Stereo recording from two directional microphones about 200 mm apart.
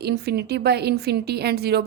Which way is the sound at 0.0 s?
55° right (ahead or behind).